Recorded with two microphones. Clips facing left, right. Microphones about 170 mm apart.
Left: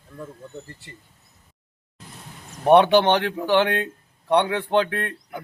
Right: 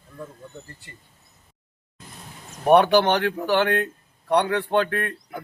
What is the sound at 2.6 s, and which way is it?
Speech, 25° left (ahead or behind).